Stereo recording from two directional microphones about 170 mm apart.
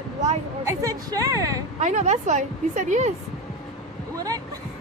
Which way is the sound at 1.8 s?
45° right (ahead or behind).